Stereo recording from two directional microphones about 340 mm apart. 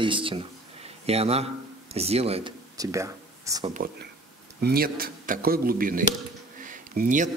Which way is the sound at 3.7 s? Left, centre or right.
Right.